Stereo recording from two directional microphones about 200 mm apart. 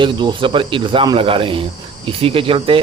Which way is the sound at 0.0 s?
25° right (ahead or behind).